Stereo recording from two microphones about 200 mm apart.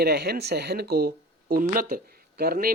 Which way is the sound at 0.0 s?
55° right (ahead or behind).